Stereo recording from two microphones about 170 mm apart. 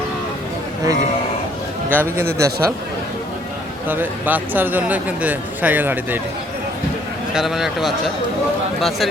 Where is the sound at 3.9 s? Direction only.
10° right (ahead or behind).